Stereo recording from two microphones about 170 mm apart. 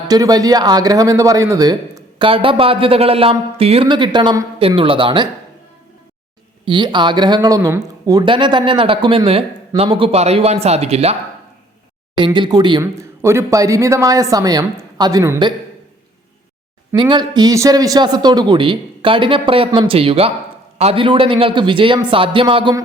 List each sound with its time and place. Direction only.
0.1 s speech: 20° right (ahead or behind)
6.7 s speech: 25° right (ahead or behind)
12.1 s speech: 25° right (ahead or behind)
16.9 s a man's voice: 25° right (ahead or behind)